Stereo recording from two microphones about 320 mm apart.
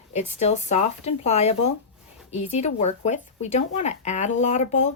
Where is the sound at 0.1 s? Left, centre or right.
Centre.